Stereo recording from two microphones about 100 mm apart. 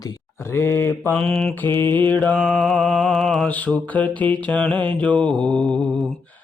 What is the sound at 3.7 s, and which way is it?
Mantra, 15° left (ahead or behind).